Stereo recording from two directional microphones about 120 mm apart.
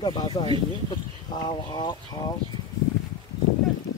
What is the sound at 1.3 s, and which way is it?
Speech, 40° left (ahead or behind).